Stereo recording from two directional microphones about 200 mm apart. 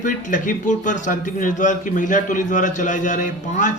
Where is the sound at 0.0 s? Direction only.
40° left (ahead or behind).